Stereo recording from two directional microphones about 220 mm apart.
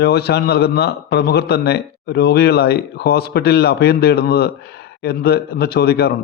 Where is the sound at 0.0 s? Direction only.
45° left (ahead or behind).